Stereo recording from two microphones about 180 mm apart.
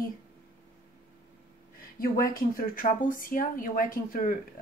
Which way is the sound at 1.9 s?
55° left (ahead or behind).